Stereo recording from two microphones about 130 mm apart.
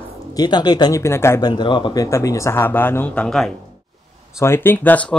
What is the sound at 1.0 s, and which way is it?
Speech, 20° left (ahead or behind).